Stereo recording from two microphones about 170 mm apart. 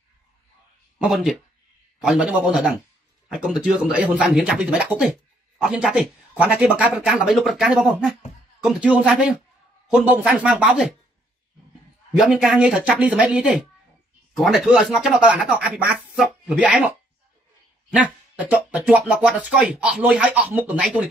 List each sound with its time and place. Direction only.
0.9 s speech: 5° right (ahead or behind)
12.2 s speech: centre (ahead or behind)
17.9 s speech: 5° right (ahead or behind)